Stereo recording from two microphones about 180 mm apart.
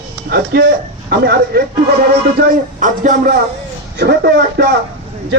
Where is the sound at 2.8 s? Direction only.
45° right (ahead or behind).